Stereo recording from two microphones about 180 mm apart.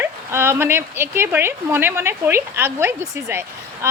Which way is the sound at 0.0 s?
15° right (ahead or behind).